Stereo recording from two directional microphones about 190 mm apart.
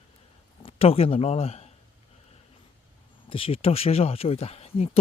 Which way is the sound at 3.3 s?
30° left (ahead or behind).